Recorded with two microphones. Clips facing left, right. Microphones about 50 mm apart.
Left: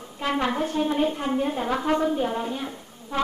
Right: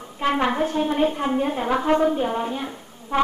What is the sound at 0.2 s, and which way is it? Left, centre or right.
A woman's voice, right.